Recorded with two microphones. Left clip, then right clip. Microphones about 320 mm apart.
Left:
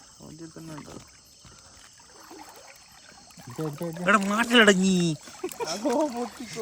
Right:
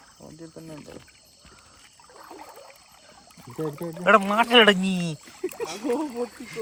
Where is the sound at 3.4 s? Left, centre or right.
Centre.